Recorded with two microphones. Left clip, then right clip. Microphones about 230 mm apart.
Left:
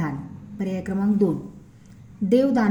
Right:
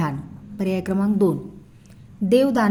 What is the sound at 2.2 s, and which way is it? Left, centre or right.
Speech, right.